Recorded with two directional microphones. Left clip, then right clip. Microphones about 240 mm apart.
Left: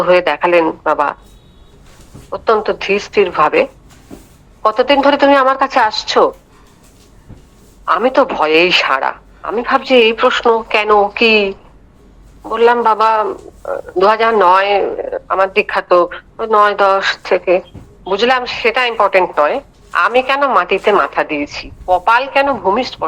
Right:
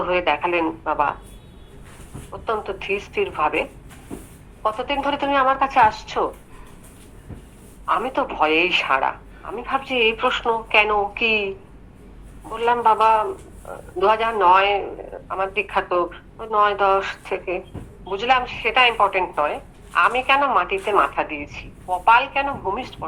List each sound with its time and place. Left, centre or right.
0.0 s a man's voice: left
2.3 s a man's voice: left
7.9 s a man's voice: left